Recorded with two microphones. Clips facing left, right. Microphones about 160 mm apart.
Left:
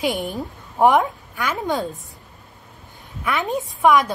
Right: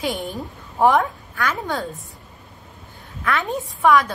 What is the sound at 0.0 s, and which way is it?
A woman's voice, 15° left (ahead or behind).